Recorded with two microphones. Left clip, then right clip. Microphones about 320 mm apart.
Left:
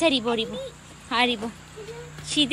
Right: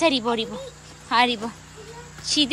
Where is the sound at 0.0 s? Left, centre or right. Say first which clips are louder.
Right 1 dB; centre.